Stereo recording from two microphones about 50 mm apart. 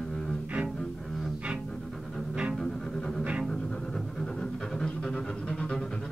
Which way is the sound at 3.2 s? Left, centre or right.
Right.